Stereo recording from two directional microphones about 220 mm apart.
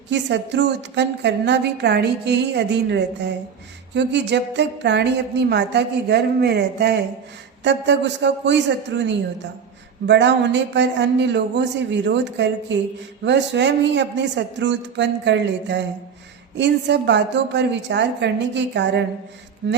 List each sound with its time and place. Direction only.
0.1 s a woman's voice: 55° right (ahead or behind)